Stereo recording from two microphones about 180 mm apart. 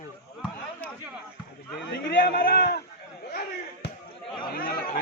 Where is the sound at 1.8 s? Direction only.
70° left (ahead or behind).